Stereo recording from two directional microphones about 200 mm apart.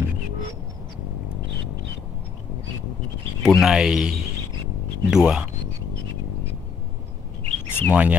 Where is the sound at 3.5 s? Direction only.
Centre (ahead or behind).